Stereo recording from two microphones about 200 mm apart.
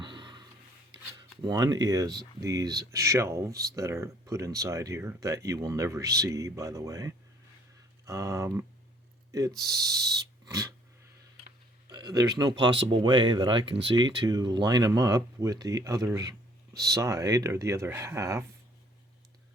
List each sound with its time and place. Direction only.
0.0 s a sound: 25° right (ahead or behind)
1.1 s speech: 20° right (ahead or behind)
9.6 s speech: 20° right (ahead or behind)
10.4 s dog: 20° right (ahead or behind)
11.9 s speech: 20° right (ahead or behind)